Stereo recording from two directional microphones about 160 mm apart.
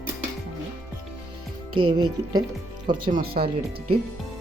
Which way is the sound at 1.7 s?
25° right (ahead or behind).